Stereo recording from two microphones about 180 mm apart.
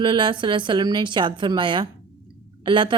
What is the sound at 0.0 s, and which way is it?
A woman's voice, 25° right (ahead or behind).